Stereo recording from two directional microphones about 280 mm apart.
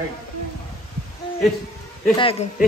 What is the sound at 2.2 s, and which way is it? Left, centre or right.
Speech, left.